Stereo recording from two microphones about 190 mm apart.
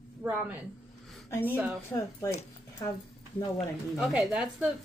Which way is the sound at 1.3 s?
10° left (ahead or behind).